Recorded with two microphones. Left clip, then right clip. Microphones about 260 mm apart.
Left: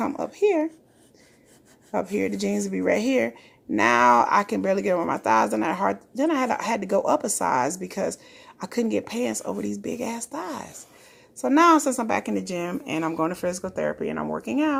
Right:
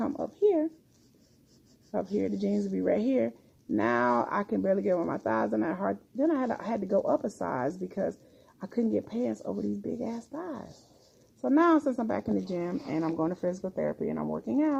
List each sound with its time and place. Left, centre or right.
0.0 s speech: left
1.9 s speech: left